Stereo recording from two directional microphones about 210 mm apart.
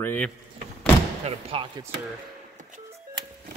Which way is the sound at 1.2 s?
25° right (ahead or behind).